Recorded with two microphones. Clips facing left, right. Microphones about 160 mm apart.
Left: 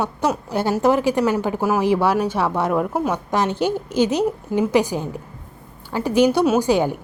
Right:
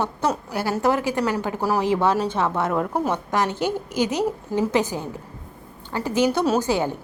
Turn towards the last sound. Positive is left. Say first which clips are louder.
# left 4 dB
turn(degrees=15)  # may be behind; listen again after turning